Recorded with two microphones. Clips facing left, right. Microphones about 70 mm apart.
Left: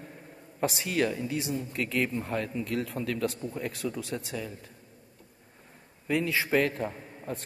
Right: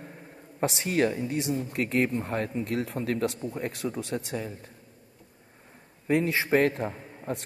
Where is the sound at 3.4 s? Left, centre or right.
Right.